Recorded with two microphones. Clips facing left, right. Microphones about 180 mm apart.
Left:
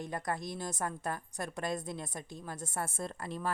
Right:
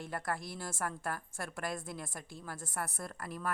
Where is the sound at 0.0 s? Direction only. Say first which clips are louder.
Left 2 dB; 20° left (ahead or behind).